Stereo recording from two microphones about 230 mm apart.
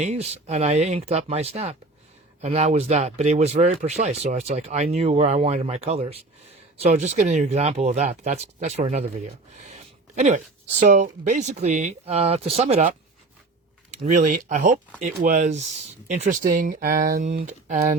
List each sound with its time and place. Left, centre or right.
0.0 s speech: right
14.0 s speech: right